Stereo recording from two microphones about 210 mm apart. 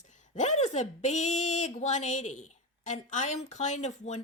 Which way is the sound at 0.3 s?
35° left (ahead or behind).